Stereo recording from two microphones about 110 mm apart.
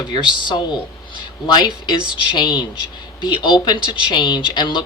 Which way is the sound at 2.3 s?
45° left (ahead or behind).